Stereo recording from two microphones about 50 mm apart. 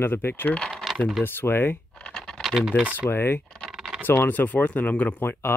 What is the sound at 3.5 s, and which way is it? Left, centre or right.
Typing, centre.